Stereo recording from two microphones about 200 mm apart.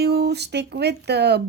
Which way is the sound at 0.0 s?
55° right (ahead or behind).